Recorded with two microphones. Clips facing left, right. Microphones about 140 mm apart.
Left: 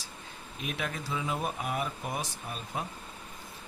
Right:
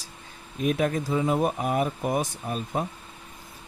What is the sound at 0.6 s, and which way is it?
Speech, 40° right (ahead or behind).